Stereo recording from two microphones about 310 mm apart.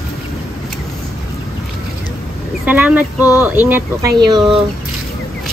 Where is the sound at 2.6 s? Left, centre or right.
Centre.